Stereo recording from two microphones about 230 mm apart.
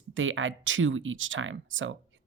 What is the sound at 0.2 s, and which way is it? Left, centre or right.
Speech, right.